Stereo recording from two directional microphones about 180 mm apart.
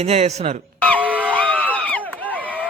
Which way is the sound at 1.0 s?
10° right (ahead or behind).